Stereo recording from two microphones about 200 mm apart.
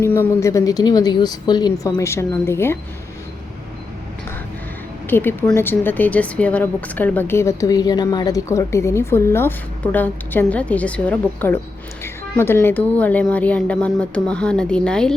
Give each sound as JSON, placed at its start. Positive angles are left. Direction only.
{"t": 0.0, "sound": "a woman's voice", "side_deg": 10}
{"t": 5.0, "sound": "a woman's voice", "side_deg": 10}